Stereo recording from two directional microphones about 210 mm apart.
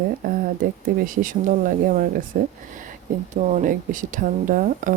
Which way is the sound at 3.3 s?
35° right (ahead or behind).